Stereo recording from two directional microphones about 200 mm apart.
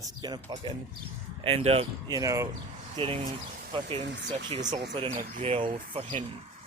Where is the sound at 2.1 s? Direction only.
15° right (ahead or behind).